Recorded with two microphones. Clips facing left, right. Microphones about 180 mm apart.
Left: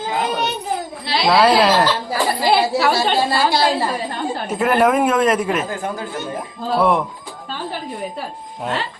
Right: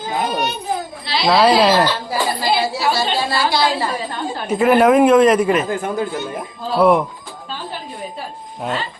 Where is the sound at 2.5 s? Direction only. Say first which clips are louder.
Left 3 dB; 60° left (ahead or behind).